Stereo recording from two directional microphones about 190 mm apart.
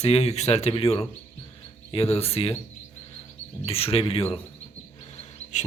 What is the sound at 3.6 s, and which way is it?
Speech, 30° left (ahead or behind).